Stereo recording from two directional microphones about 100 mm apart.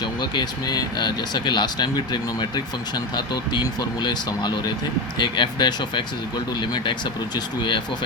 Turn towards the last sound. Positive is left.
turn(degrees=50)  # may be behind; listen again after turning